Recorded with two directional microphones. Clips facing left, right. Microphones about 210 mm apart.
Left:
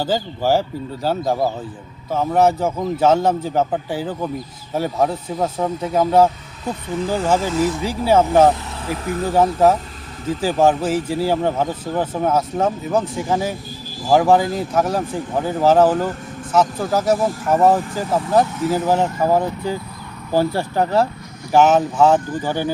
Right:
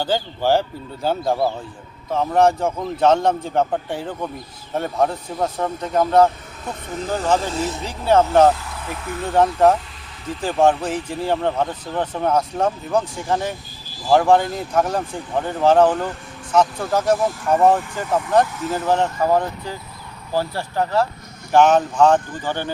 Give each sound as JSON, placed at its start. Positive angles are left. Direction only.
{"t": 0.0, "sound": "speech", "side_deg": 5}
{"t": 7.5, "sound": "speech", "side_deg": -25}
{"t": 7.8, "sound": "speech", "side_deg": 10}